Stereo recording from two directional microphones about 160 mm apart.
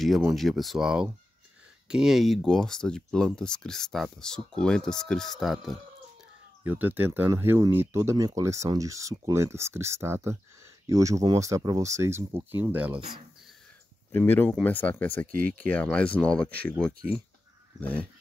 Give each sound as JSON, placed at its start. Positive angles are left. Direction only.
{"t": 0.0, "sound": "speech", "side_deg": 0}
{"t": 6.6, "sound": "speech", "side_deg": -10}
{"t": 14.1, "sound": "speech", "side_deg": 15}